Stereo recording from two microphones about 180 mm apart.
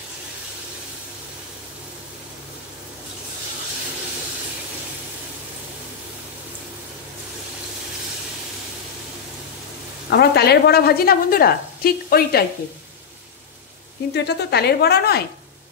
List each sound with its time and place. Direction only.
10.0 s a woman's voice: 65° left (ahead or behind)
14.1 s a woman's voice: 65° left (ahead or behind)